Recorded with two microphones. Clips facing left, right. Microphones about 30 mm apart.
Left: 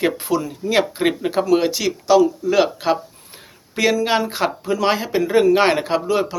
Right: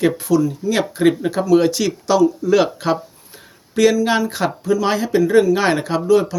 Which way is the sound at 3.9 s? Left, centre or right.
Left.